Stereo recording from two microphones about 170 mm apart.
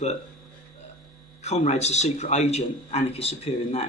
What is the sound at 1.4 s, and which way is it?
A man's voice, 40° left (ahead or behind).